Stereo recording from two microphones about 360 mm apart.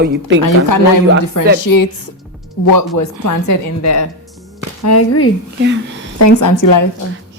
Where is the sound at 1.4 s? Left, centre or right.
Left.